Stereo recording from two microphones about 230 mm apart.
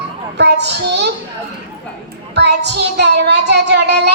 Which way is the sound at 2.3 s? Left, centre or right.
Right.